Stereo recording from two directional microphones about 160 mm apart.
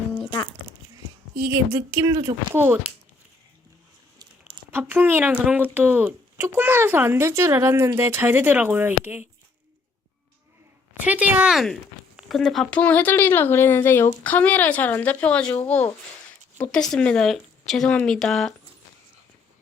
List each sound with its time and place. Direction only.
1.5 s speech: 20° right (ahead or behind)
4.7 s speech: 10° right (ahead or behind)
11.0 s speech: 10° right (ahead or behind)